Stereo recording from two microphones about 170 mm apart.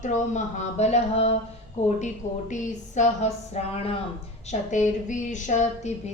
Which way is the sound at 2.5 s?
45° left (ahead or behind).